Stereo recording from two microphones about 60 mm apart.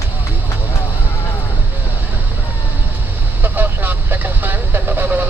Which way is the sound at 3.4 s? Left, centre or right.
Right.